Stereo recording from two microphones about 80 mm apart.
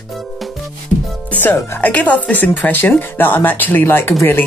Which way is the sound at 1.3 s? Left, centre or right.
Left.